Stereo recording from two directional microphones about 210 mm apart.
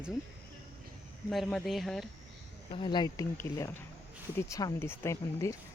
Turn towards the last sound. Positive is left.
turn(degrees=15)  # may be behind; listen again after turning